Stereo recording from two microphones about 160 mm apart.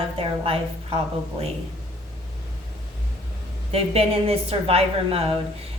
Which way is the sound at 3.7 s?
40° right (ahead or behind).